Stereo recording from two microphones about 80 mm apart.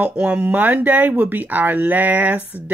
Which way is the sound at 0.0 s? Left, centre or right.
Centre.